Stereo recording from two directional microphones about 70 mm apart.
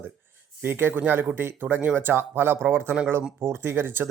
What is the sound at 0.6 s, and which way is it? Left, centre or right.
Speech, right.